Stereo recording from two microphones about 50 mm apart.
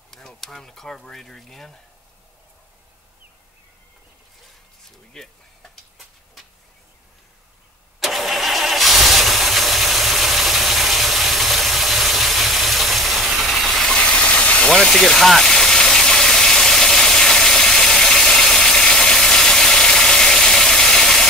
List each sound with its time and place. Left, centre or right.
0.4 s speech: centre
5.2 s a sound: centre
8.0 s vehicle: centre
13.9 s engine: centre
14.7 s engine: centre